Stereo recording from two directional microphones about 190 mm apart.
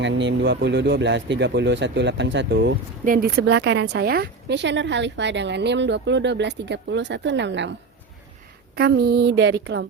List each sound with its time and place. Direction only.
0.0 s a woman's voice: 70° right (ahead or behind)
3.0 s a woman's voice: 50° right (ahead or behind); by 7.7 s 70° right (ahead or behind)
8.7 s a woman's voice: 60° right (ahead or behind)